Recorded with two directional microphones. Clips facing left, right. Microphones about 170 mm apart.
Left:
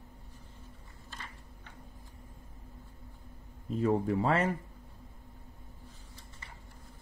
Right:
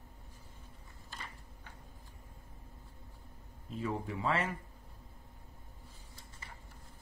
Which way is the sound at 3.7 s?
40° left (ahead or behind).